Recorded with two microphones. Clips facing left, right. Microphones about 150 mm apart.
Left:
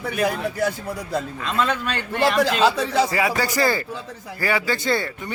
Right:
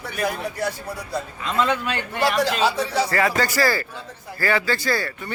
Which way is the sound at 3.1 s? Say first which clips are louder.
Right 1 dB; 10° left (ahead or behind).